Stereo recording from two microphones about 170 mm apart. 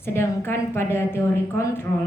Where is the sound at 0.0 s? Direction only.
15° left (ahead or behind).